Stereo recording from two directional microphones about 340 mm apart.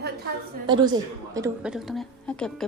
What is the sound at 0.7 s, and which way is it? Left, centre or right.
A woman's voice, centre.